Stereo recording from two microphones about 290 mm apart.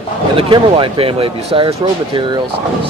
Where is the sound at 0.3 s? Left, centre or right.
Centre.